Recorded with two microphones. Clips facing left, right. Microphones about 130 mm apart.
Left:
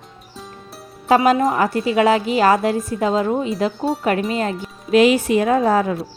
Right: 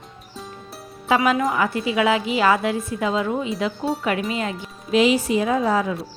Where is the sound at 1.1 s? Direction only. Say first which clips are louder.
Left 4 dB; 35° left (ahead or behind).